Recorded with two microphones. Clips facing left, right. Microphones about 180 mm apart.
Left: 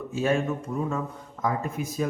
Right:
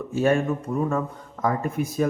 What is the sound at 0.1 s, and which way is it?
Speech, 55° right (ahead or behind).